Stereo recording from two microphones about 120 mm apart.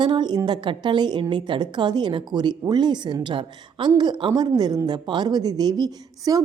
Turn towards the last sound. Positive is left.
turn(degrees=-30)  # may be behind; listen again after turning